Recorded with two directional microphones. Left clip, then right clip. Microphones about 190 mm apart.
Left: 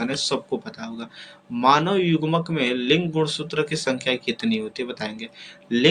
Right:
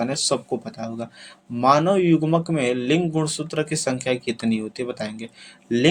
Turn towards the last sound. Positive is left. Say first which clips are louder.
# right 1 dB
turn(degrees=-45)  # may be behind; listen again after turning